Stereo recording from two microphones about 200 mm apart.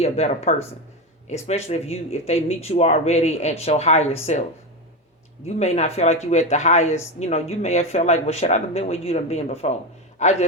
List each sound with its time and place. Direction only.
0.0 s speech: 35° left (ahead or behind)
5.5 s speech: 35° left (ahead or behind)